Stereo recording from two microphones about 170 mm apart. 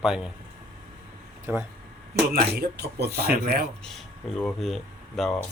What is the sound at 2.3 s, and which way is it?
Speech, 70° right (ahead or behind).